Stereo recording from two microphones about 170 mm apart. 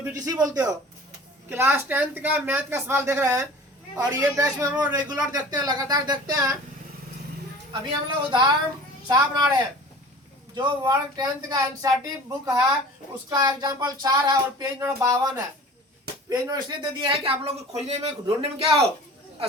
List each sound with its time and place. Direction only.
0.2 s speech: 20° right (ahead or behind)
7.7 s speech: 25° right (ahead or behind)